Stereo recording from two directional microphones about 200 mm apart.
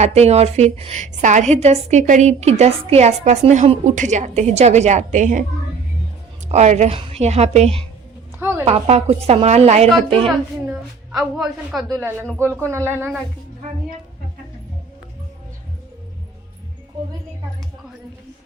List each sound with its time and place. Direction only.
0.0 s a woman's voice: 35° right (ahead or behind)
6.5 s a woman's voice: 35° right (ahead or behind)
8.4 s a sound: 10° right (ahead or behind)
8.6 s a woman's voice: 30° right (ahead or behind)
10.2 s a woman's voice: centre (ahead or behind)
12.5 s speech: 15° right (ahead or behind)